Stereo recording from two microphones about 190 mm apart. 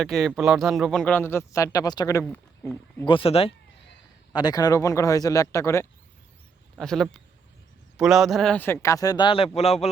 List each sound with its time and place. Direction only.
0.0 s a man's voice: centre (ahead or behind)
3.1 s speech: 30° left (ahead or behind)
4.3 s a man's voice: 20° left (ahead or behind)
6.7 s a man's voice: centre (ahead or behind); by 9.9 s 35° left (ahead or behind)